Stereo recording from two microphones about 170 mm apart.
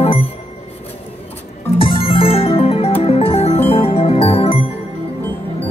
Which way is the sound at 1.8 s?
30° left (ahead or behind).